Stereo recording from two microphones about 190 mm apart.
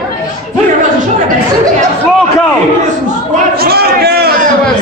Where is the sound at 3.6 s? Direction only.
55° right (ahead or behind).